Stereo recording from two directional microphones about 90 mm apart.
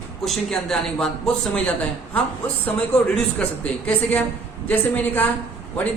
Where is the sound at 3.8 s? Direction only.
15° left (ahead or behind).